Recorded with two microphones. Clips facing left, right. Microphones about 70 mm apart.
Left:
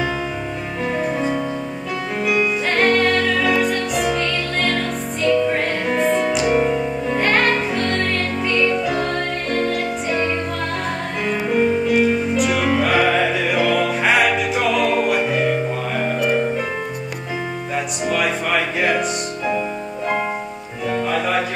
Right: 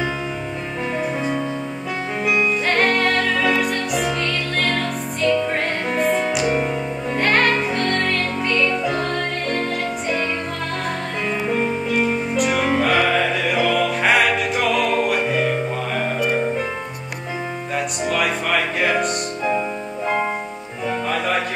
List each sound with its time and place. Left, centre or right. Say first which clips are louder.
0.9 s music: left 2 dB; centre
2.7 s music: left 3 dB; centre
11.9 s music: left 3 dB; centre
17.7 s music: even; centre